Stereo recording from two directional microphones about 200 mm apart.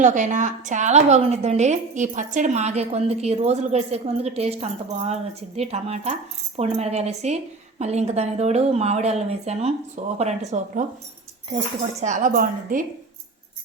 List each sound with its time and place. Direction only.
0.0 s a woman's voice: 40° right (ahead or behind)
11.9 s a woman's voice: 35° right (ahead or behind)